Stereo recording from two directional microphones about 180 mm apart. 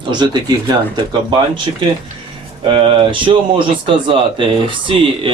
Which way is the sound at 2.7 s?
30° right (ahead or behind).